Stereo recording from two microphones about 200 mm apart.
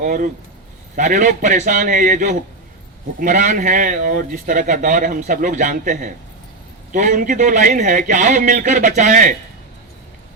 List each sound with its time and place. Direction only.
0.0 s speech: 45° right (ahead or behind)